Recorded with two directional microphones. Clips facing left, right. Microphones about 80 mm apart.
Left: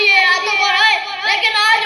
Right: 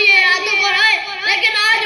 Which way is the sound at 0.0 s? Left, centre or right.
Left.